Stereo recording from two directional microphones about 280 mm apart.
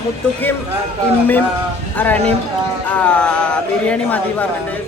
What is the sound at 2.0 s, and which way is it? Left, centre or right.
Speech, centre.